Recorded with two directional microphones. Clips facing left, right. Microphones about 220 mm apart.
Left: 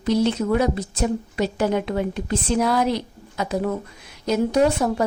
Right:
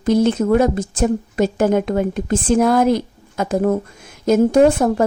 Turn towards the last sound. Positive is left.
turn(degrees=-50)  # may be behind; listen again after turning